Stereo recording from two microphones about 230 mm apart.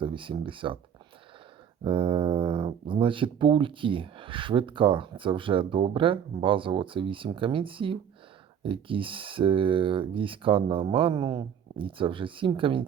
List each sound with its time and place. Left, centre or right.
0.0 s speech: right
1.8 s speech: right